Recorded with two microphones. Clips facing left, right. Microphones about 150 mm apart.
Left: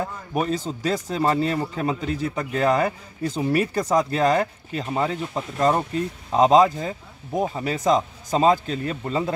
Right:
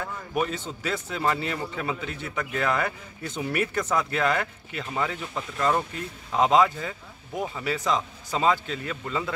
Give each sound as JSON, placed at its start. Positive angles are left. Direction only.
{"t": 0.0, "sound": "a man's voice", "side_deg": 35}